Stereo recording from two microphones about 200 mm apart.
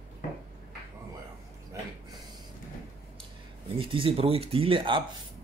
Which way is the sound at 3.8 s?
25° right (ahead or behind).